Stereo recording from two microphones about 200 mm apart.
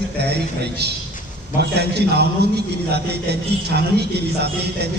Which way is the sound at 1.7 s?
55° right (ahead or behind).